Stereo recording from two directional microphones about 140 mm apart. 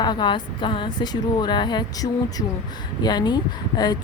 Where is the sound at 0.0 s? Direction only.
30° left (ahead or behind).